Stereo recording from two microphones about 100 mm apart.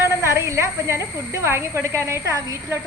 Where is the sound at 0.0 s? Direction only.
25° right (ahead or behind).